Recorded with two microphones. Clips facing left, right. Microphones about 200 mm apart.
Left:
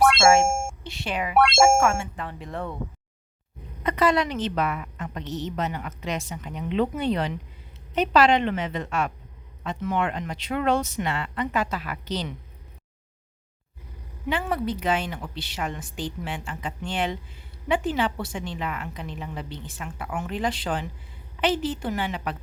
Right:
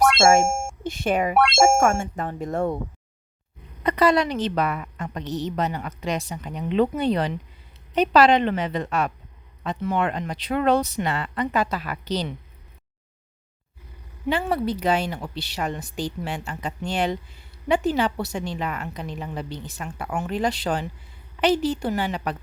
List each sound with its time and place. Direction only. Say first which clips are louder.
0.0 s a sound: right 1 dB; centre (ahead or behind)
0.9 s speech: right 11 dB; 50° right (ahead or behind)
1.4 s speech: left 2 dB; centre (ahead or behind)
1.8 s speech: right 3 dB; 45° right (ahead or behind)
3.8 s a woman's voice: right 3 dB; 35° right (ahead or behind)
14.3 s a woman's voice: right 3 dB; 35° right (ahead or behind)